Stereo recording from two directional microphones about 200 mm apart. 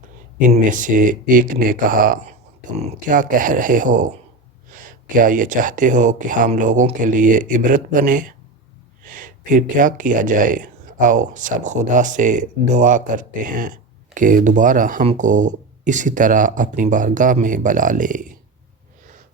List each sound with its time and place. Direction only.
0.3 s speech: 40° right (ahead or behind)